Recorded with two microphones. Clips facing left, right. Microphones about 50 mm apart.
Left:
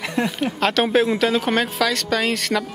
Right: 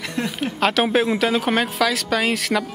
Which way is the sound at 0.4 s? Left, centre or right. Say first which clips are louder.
Right 2 dB; centre.